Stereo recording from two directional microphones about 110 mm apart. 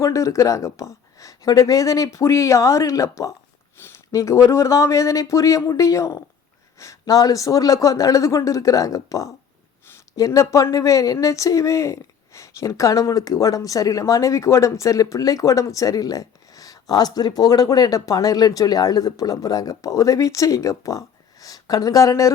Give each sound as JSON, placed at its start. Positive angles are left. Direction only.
{"t": 0.0, "sound": "speech", "side_deg": 30}